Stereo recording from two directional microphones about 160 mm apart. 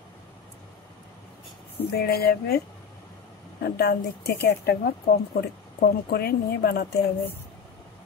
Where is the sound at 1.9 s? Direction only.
75° left (ahead or behind).